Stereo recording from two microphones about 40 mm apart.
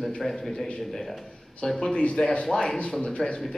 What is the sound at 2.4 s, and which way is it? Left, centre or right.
Speech, centre.